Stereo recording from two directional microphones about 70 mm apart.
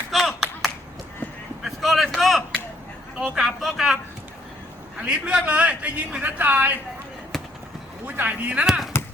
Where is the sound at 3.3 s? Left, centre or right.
Centre.